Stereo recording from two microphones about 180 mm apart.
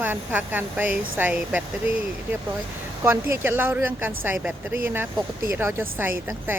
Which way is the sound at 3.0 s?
15° right (ahead or behind).